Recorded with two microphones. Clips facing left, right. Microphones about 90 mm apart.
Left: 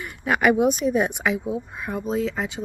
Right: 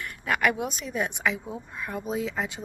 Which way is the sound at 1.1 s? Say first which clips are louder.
Left 5 dB; 10° left (ahead or behind).